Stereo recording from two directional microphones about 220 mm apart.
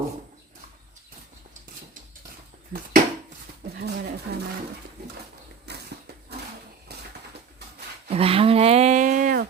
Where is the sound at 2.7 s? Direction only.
45° right (ahead or behind).